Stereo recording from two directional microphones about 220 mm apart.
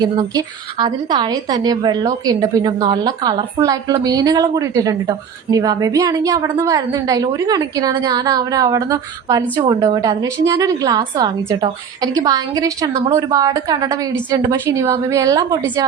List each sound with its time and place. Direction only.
0.0 s a woman's voice: 20° right (ahead or behind)